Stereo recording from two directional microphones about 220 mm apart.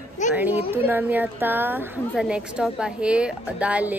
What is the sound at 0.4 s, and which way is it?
A woman's voice, 10° right (ahead or behind).